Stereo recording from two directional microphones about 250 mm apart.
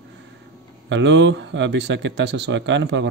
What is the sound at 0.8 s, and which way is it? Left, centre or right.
Speech, right.